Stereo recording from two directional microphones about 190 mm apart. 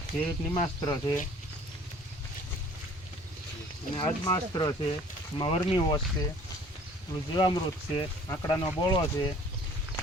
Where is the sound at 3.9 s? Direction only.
25° left (ahead or behind).